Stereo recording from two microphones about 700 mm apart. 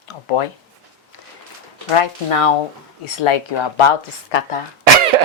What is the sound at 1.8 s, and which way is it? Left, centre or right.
Speech, left.